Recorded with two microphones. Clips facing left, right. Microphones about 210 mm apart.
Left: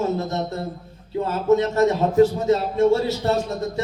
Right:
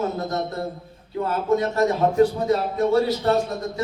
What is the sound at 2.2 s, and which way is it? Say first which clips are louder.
A man's voice: left 2 dB; 25° left (ahead or behind).